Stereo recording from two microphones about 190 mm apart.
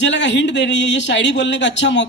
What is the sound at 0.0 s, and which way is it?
Speech, 70° left (ahead or behind).